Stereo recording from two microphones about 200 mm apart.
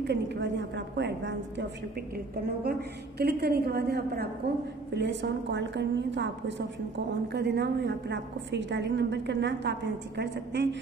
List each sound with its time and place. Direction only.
0.0 s a woman's voice: 60° right (ahead or behind)
4.9 s a woman's voice: 60° right (ahead or behind)